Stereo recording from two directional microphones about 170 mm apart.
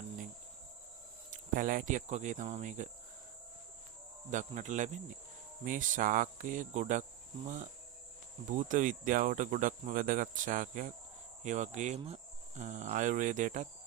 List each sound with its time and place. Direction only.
1.3 s speech: 50° right (ahead or behind)
4.3 s speech: 45° right (ahead or behind)
8.5 s speech: 50° right (ahead or behind)